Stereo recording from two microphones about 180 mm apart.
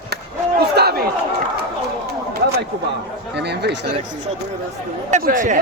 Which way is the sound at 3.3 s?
70° right (ahead or behind).